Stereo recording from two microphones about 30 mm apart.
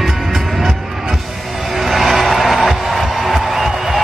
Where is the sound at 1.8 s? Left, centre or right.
Centre.